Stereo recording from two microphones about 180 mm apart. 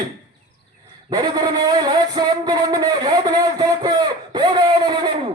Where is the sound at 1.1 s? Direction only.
20° right (ahead or behind).